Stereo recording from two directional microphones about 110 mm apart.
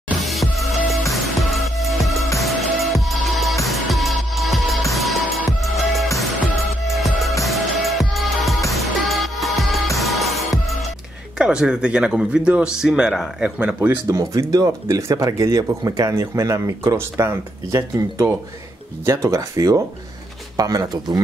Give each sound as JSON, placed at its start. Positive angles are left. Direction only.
{"t": 0.2, "sound": "music", "side_deg": 0}
{"t": 11.3, "sound": "speech", "side_deg": -10}
{"t": 14.0, "sound": "speech", "side_deg": -30}